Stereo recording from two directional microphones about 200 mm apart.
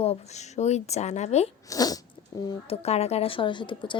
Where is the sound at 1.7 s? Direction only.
20° left (ahead or behind).